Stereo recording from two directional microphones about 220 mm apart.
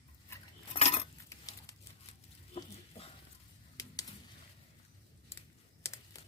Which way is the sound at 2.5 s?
25° left (ahead or behind).